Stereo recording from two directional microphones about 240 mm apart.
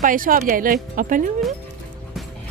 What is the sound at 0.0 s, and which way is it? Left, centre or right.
Speech, right.